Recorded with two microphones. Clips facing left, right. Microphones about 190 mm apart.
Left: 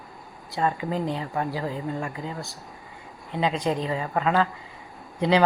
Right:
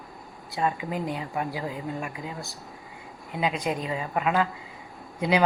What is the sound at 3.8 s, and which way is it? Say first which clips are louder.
Speech: left 2 dB; 15° right (ahead or behind).